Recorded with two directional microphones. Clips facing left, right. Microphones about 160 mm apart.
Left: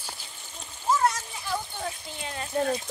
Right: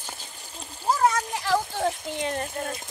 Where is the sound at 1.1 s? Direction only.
75° right (ahead or behind); by 2.5 s 55° right (ahead or behind).